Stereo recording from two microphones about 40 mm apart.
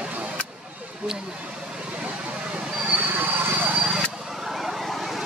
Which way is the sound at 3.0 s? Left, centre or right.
Right.